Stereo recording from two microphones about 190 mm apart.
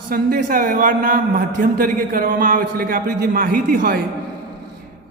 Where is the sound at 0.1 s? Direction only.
50° right (ahead or behind).